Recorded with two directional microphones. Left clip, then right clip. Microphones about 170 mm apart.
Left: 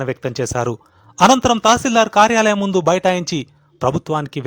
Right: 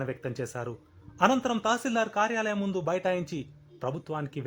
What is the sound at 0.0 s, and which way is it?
Speech, 45° left (ahead or behind).